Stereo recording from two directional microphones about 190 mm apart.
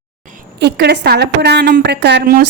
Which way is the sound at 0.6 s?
60° right (ahead or behind).